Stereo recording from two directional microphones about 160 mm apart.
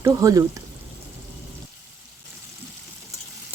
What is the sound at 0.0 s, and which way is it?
Speech, 20° right (ahead or behind).